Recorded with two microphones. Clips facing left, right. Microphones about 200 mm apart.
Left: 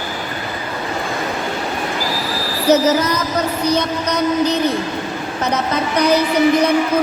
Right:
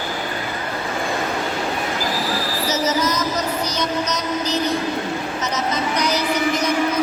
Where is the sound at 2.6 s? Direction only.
60° left (ahead or behind).